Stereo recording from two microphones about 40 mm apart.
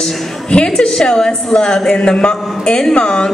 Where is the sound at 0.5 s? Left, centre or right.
Left.